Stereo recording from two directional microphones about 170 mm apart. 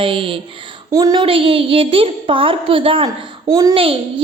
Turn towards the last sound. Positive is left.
turn(degrees=-30)  # may be behind; listen again after turning